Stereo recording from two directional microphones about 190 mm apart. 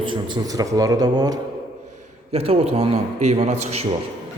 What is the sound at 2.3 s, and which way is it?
A man's voice, 30° right (ahead or behind).